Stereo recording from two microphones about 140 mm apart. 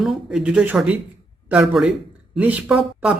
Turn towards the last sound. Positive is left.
turn(degrees=-10)  # may be behind; listen again after turning